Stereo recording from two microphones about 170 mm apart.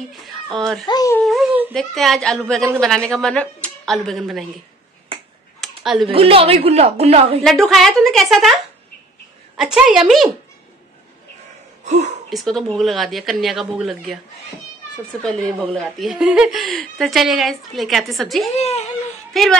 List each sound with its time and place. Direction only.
0.8 s speech: 20° left (ahead or behind)
1.1 s speech: centre (ahead or behind)
5.6 s a sound: centre (ahead or behind)
6.0 s speech: 35° right (ahead or behind)
7.4 s speech: centre (ahead or behind)
9.6 s speech: centre (ahead or behind)
11.8 s a sound: 45° right (ahead or behind)
12.3 s speech: centre (ahead or behind)
15.2 s speech: centre (ahead or behind)
18.5 s speech: 40° left (ahead or behind)
19.3 s speech: centre (ahead or behind)